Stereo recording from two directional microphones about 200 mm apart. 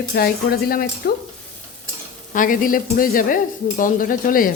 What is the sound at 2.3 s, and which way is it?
Speech, 45° left (ahead or behind).